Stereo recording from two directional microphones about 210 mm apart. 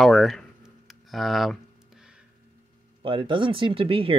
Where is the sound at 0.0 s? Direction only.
Centre (ahead or behind).